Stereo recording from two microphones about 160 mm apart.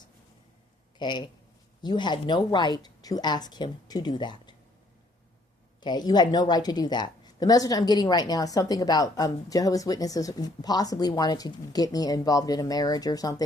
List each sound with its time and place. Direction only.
0.9 s a woman's voice: 30° left (ahead or behind)
5.8 s a woman's voice: 25° left (ahead or behind)